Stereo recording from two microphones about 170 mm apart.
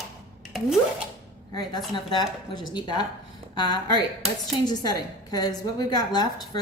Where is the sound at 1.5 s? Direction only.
25° left (ahead or behind).